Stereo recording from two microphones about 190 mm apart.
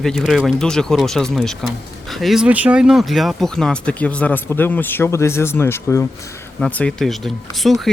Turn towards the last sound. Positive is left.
turn(degrees=0)  # may be behind; listen again after turning